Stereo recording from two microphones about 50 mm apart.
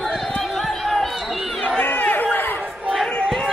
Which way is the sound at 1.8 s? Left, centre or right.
Left.